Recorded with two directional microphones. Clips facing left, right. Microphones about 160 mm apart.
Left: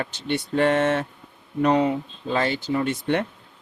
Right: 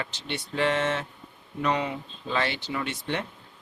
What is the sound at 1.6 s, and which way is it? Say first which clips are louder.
Speech: left 7 dB; 40° left (ahead or behind).